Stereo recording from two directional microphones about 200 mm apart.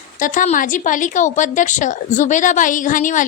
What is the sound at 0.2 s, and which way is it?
A woman's voice, 40° left (ahead or behind).